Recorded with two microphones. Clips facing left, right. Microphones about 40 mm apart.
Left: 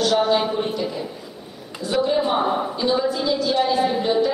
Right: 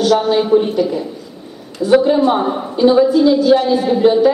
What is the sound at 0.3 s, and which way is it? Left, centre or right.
Speech, centre.